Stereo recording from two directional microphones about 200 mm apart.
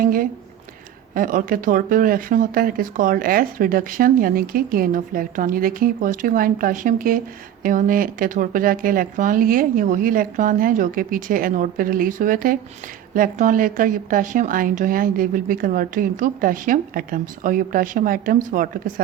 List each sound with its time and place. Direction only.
0.0 s speech: 45° right (ahead or behind)